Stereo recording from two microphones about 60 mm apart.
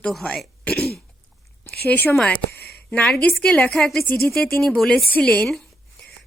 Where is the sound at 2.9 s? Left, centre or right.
Centre.